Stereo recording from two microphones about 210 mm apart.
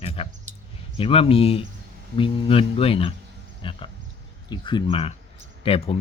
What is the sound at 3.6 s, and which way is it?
Pig, 25° left (ahead or behind).